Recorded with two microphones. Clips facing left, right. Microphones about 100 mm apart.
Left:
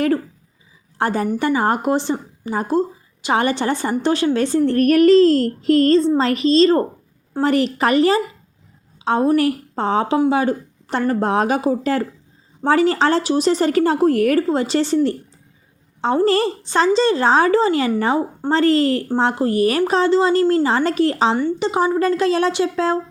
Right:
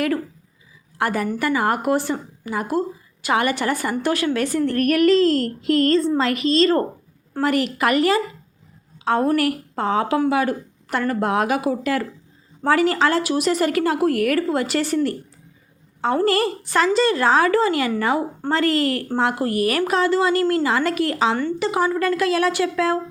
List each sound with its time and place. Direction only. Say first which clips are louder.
0.9 s a woman's voice: left 3 dB; 30° left (ahead or behind)
21.3 s a woman's voice: left 3 dB; 15° left (ahead or behind)
21.7 s a woman's voice: left 3 dB; 25° left (ahead or behind)